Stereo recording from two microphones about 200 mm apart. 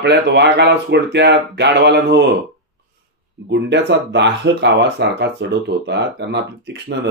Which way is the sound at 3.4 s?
60° right (ahead or behind).